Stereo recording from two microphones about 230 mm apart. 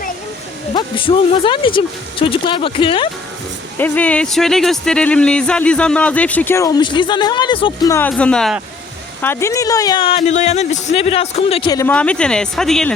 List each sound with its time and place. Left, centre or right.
0.7 s speech: left
3.8 s speech: centre
7.9 s speech: centre